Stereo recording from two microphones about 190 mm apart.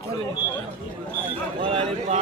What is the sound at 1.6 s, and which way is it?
Speech, 30° right (ahead or behind).